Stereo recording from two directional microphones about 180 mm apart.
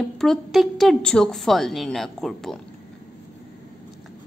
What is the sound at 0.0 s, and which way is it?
A woman's voice, centre (ahead or behind).